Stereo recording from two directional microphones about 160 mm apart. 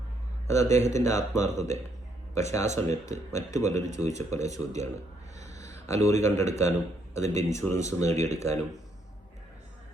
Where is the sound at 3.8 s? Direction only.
45° right (ahead or behind).